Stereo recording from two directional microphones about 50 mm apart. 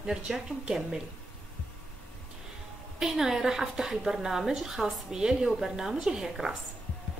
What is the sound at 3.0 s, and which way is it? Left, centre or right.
A woman's voice, centre.